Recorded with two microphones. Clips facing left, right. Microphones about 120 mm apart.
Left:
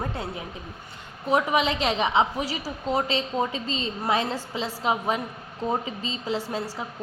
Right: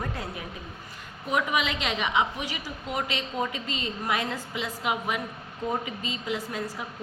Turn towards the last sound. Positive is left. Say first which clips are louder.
# left 3 dB
turn(degrees=30)  # may be behind; listen again after turning